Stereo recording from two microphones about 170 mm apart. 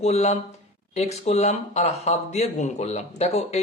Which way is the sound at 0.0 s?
40° left (ahead or behind).